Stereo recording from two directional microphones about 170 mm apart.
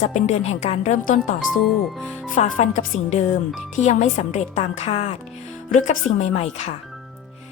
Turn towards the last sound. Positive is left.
turn(degrees=40)  # may be behind; listen again after turning